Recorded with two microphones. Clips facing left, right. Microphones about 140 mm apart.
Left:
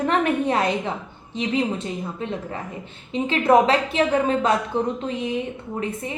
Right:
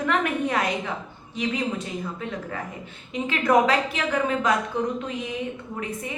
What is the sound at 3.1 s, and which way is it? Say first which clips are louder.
A woman's voice: left 4 dB; 30° left (ahead or behind).